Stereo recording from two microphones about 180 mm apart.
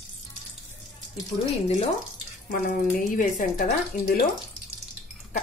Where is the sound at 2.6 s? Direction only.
50° left (ahead or behind).